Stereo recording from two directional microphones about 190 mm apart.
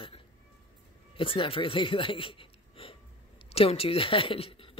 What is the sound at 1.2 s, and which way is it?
Speech, 30° left (ahead or behind).